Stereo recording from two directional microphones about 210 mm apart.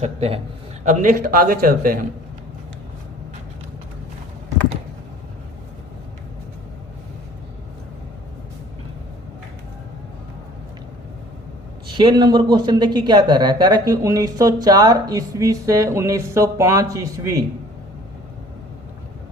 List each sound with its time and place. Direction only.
0.0 s a man's voice: 30° right (ahead or behind)
11.9 s speech: 20° right (ahead or behind)